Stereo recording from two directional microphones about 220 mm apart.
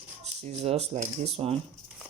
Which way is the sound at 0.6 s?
30° right (ahead or behind).